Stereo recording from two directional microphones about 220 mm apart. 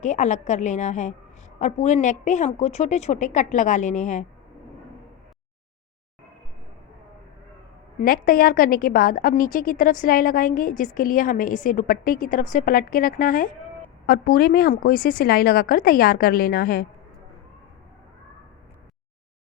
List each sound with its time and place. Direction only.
0.0 s a woman's voice: 35° left (ahead or behind)
8.0 s a woman's voice: 40° left (ahead or behind)